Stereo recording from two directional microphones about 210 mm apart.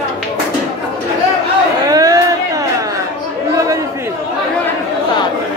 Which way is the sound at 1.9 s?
15° right (ahead or behind).